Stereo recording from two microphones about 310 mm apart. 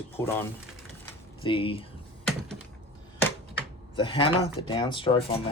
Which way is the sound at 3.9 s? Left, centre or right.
Centre.